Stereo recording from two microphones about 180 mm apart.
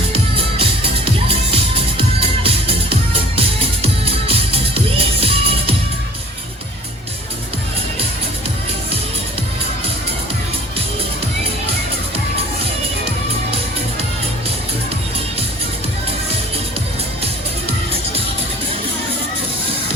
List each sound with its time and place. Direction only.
0.1 s music: 30° right (ahead or behind)
2.0 s music: 30° right (ahead or behind)